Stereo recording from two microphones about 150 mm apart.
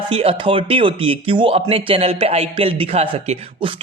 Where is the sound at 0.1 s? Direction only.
40° right (ahead or behind).